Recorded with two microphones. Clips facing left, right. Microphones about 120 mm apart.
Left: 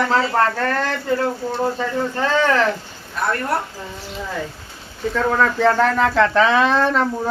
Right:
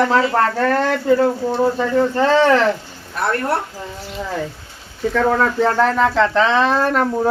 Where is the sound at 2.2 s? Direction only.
30° right (ahead or behind).